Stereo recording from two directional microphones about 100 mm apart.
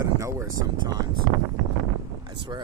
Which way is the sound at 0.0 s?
30° right (ahead or behind).